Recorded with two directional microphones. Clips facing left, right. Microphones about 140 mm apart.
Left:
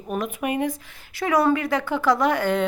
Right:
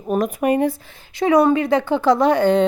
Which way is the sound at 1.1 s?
20° right (ahead or behind).